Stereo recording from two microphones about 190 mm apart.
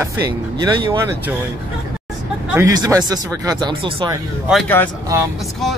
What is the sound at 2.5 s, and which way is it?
Speech, 15° right (ahead or behind).